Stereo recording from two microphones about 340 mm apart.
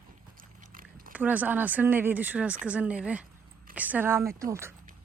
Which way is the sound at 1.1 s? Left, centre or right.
Centre.